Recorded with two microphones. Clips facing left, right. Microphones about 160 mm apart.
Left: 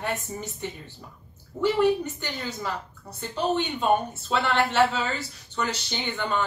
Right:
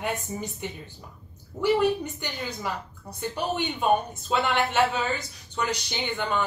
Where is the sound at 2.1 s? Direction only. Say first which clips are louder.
Left 1 dB; 15° right (ahead or behind).